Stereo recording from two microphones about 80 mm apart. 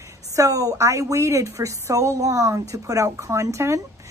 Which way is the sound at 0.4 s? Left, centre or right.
Right.